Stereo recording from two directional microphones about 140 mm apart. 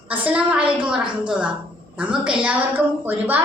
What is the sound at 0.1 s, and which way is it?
A woman's voice, 10° right (ahead or behind).